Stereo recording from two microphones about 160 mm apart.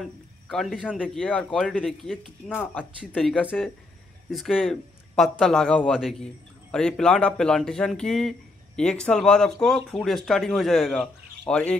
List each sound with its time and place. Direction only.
0.0 s a man's voice: centre (ahead or behind)